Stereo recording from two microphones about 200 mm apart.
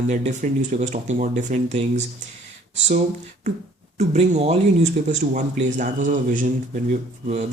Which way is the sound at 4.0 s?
35° right (ahead or behind).